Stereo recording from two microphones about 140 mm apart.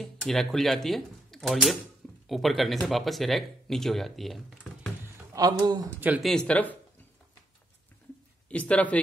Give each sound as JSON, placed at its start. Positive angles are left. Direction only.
{"t": 0.0, "sound": "speech", "side_deg": 0}
{"t": 5.0, "sound": "a sound", "side_deg": -20}
{"t": 5.9, "sound": "speech", "side_deg": -10}
{"t": 6.2, "sound": "speech", "side_deg": 5}
{"t": 8.5, "sound": "speech", "side_deg": 10}